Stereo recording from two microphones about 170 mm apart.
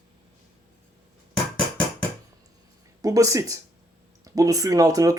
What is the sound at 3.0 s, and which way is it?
Speech, 20° right (ahead or behind).